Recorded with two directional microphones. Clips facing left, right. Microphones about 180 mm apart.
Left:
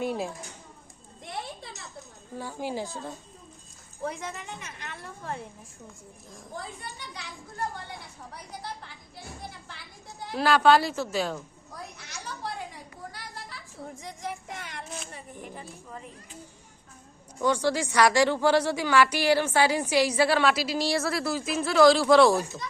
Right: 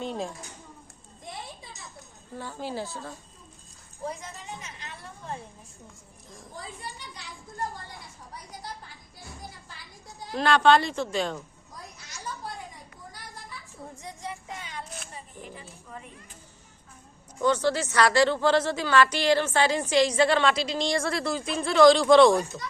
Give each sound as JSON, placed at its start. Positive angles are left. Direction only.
{"t": 0.0, "sound": "speech", "side_deg": 10}
{"t": 1.2, "sound": "a sound", "side_deg": 70}
{"t": 2.3, "sound": "a woman's voice", "side_deg": 10}
{"t": 4.0, "sound": "a woman's voice", "side_deg": 65}
{"t": 10.3, "sound": "a woman's voice", "side_deg": 5}
{"t": 11.9, "sound": "a sound", "side_deg": 65}
{"t": 14.3, "sound": "child singing", "side_deg": 70}
{"t": 17.4, "sound": "a woman's voice", "side_deg": 10}